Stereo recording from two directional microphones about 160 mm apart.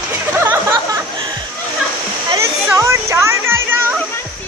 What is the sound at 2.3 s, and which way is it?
Music, 20° right (ahead or behind).